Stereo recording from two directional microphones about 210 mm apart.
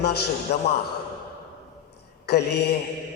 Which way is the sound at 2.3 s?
50° left (ahead or behind).